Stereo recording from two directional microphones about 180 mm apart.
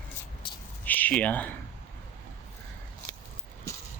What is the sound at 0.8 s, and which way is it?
Speech, 10° left (ahead or behind).